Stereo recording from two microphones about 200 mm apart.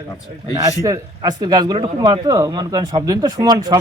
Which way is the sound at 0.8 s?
20° right (ahead or behind).